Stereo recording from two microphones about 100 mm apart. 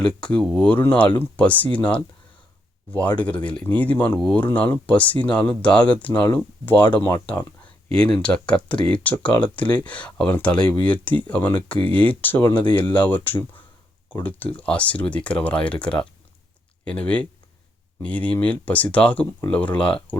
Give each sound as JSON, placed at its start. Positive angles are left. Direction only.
{"t": 0.0, "sound": "speech", "side_deg": 10}
{"t": 0.7, "sound": "speech", "side_deg": 15}
{"t": 4.4, "sound": "speech", "side_deg": 20}